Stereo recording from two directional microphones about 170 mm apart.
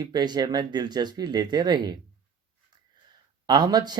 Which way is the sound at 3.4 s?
25° right (ahead or behind).